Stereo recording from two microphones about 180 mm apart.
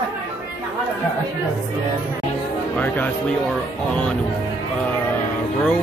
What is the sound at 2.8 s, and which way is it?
Speech, 5° left (ahead or behind).